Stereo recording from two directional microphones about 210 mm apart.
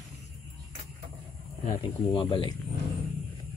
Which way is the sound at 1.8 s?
25° left (ahead or behind).